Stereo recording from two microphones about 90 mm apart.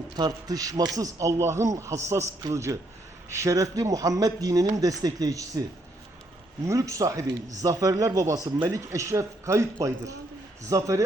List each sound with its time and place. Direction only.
0.2 s a man's voice: 45° right (ahead or behind)
6.7 s a man's voice: 35° right (ahead or behind)